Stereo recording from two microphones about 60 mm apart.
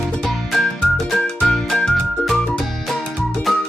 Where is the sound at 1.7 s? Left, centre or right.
Centre.